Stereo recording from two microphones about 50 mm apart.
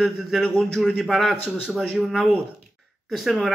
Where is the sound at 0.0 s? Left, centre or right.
Centre.